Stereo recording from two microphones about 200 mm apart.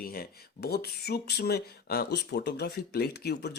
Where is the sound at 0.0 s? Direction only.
50° left (ahead or behind).